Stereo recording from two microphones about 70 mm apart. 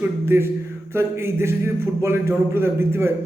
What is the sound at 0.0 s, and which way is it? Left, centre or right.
A man's voice, right.